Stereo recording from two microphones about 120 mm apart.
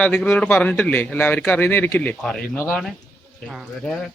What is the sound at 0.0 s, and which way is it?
A man's voice, 10° left (ahead or behind).